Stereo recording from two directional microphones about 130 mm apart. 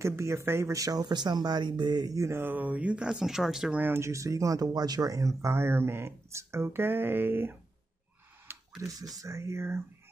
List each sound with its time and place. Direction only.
0.0 s speech: 20° right (ahead or behind); by 3.8 s 5° right (ahead or behind)
3.8 s speech: 20° right (ahead or behind)
8.5 s a sound: 20° right (ahead or behind)
9.2 s speech: 20° right (ahead or behind)